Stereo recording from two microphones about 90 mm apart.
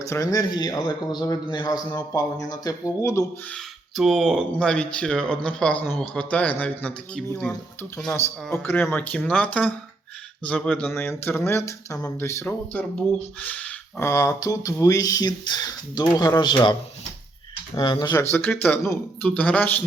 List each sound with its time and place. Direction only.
0.0 s a man's voice: 35° left (ahead or behind)
3.9 s speech: centre (ahead or behind)
8.5 s speech: 25° left (ahead or behind)
9.1 s speech: 10° left (ahead or behind); by 12.5 s 30° left (ahead or behind)
12.5 s speech: 15° left (ahead or behind)
14.0 s speech: 35° left (ahead or behind); by 16.7 s 55° left (ahead or behind)
17.7 s speech: 55° left (ahead or behind)
18.2 s speech: 25° left (ahead or behind)